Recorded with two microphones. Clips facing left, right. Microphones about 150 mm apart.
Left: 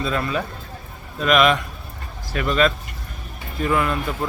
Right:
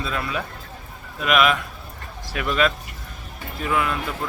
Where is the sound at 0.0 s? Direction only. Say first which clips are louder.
Left 4 dB; 5° right (ahead or behind).